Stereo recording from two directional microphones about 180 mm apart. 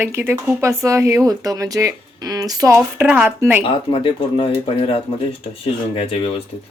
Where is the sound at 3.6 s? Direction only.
30° left (ahead or behind).